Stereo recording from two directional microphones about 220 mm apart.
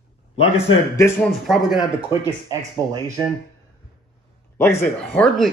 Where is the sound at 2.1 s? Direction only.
15° right (ahead or behind).